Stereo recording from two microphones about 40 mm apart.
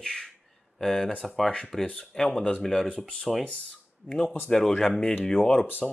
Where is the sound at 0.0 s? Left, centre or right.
Centre.